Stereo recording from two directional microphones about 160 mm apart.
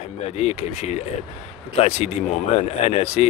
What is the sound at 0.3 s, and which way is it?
Speech, 40° left (ahead or behind).